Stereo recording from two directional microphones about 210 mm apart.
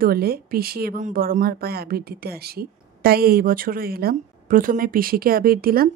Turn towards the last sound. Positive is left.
turn(degrees=-45)  # may be behind; listen again after turning